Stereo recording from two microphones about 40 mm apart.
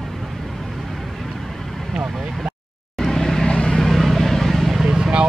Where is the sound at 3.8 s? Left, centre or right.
Centre.